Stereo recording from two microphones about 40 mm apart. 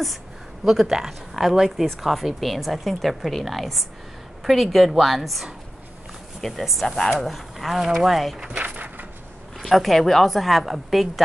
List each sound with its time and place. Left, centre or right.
0.7 s speech: centre
8.5 s a sound: right
9.6 s speech: centre